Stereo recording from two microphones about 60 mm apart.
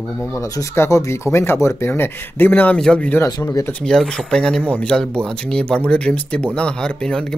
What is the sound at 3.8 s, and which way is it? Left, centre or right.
Speech, centre.